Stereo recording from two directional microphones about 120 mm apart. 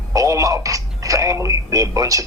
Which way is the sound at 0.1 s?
25° right (ahead or behind).